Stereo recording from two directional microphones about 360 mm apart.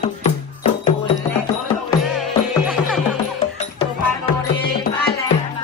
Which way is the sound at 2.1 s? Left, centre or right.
Centre.